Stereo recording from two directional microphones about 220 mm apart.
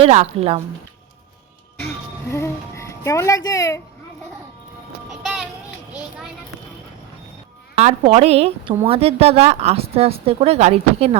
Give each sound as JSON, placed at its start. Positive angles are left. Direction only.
{"t": 0.0, "sound": "a woman's voice", "side_deg": -30}
{"t": 2.3, "sound": "music", "side_deg": 10}
{"t": 5.2, "sound": "music", "side_deg": 0}
{"t": 5.9, "sound": "children playing", "side_deg": -5}
{"t": 7.8, "sound": "a woman's voice", "side_deg": -25}